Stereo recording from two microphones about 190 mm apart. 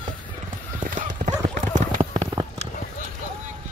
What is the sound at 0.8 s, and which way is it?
Clip-clop, 40° right (ahead or behind).